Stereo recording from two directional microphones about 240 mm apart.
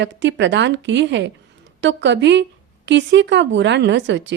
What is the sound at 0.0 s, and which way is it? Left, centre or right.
Speech, right.